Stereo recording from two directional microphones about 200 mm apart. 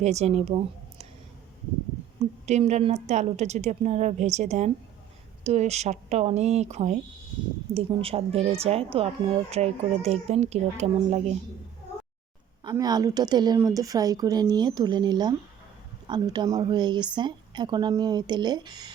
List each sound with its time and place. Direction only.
0.0 s speech: 35° right (ahead or behind)
2.5 s speech: 35° right (ahead or behind)
12.6 s speech: 20° right (ahead or behind)